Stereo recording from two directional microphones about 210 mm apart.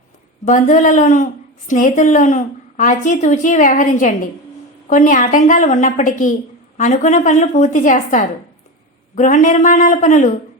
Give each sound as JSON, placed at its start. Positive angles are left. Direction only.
{"t": 0.4, "sound": "a woman's voice", "side_deg": 35}